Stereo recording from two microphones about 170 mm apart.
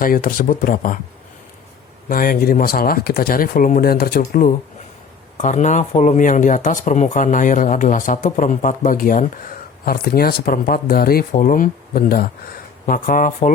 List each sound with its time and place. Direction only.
0.0 s speech: 55° left (ahead or behind)
2.0 s speech: 55° left (ahead or behind)
4.2 s speech: 50° left (ahead or behind)
12.8 s speech: 50° left (ahead or behind)